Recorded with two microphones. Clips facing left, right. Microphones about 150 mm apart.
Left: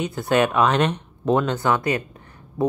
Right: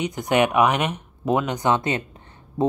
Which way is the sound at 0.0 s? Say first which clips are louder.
Even; 20° right (ahead or behind).